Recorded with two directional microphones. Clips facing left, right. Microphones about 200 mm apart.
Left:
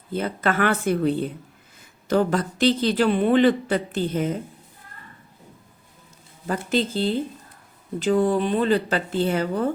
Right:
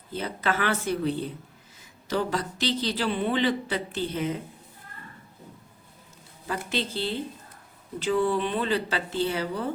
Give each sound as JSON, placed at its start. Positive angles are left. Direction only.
{"t": 0.1, "sound": "speech", "side_deg": 55}
{"t": 6.7, "sound": "speech", "side_deg": 45}